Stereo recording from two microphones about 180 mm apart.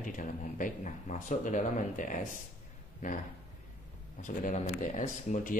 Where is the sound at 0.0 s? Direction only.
45° left (ahead or behind).